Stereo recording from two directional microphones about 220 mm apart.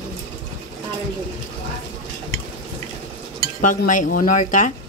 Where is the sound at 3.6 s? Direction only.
35° left (ahead or behind).